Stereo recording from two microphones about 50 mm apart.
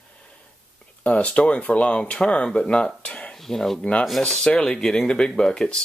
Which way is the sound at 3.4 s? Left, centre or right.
Centre.